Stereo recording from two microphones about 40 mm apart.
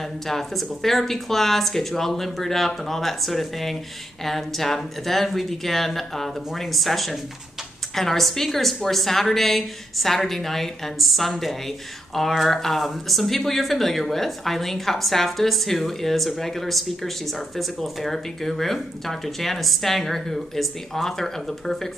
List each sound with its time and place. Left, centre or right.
0.0 s a woman's voice: centre